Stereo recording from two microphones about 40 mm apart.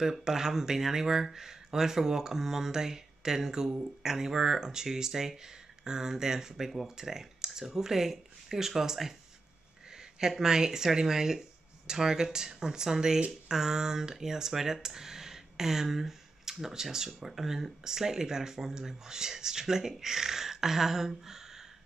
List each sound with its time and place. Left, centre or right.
0.0 s speech: centre